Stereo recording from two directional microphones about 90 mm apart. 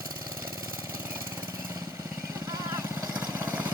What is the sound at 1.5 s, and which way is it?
Vehicle, 45° right (ahead or behind).